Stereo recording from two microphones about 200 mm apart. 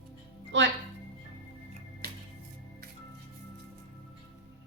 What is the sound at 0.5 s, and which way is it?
Speech, 65° right (ahead or behind).